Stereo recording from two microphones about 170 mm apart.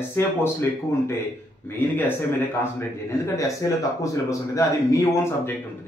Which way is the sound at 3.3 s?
20° left (ahead or behind).